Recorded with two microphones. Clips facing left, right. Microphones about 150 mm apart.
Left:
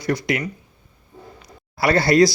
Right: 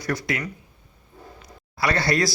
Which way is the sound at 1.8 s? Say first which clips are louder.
Left 6 dB; 30° left (ahead or behind).